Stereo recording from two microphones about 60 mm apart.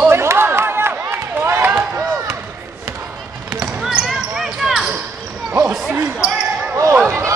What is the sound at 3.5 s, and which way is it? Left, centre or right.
Basketball bounce, centre.